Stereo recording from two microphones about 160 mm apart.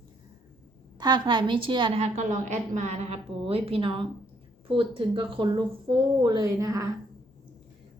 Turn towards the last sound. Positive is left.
turn(degrees=-20)  # may be behind; listen again after turning